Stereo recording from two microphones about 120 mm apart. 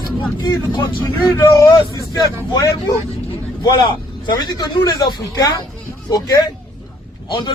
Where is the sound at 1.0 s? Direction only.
20° left (ahead or behind).